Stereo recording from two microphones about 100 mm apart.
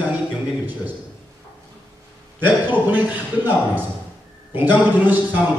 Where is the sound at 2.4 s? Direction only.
20° right (ahead or behind).